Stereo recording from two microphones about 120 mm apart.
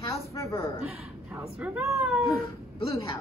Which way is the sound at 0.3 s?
25° left (ahead or behind).